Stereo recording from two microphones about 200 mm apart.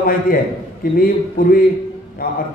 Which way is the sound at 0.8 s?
45° left (ahead or behind).